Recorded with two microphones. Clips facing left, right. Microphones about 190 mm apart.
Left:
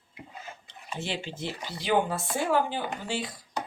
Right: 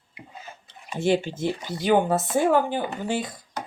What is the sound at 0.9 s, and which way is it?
Speech, 45° right (ahead or behind).